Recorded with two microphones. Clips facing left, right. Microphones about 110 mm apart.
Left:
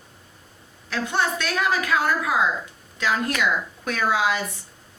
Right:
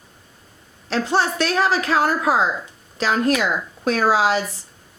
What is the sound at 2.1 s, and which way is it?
Speech, 35° right (ahead or behind).